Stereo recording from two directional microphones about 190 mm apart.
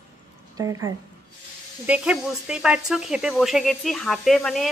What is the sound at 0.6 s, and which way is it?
Speech, 15° right (ahead or behind).